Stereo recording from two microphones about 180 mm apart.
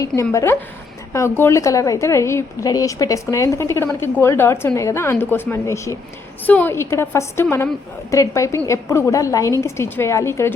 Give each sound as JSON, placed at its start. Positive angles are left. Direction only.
{"t": 0.2, "sound": "a woman's voice", "side_deg": 15}